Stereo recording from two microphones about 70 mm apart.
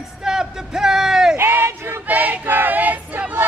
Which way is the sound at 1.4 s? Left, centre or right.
Right.